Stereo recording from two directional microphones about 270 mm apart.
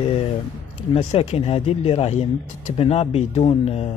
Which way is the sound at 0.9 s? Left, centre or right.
Left.